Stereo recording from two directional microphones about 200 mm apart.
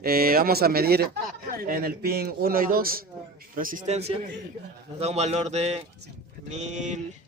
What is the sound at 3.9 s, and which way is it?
A man's voice, 30° right (ahead or behind).